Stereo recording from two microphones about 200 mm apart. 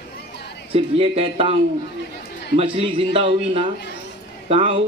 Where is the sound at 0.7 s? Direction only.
30° right (ahead or behind).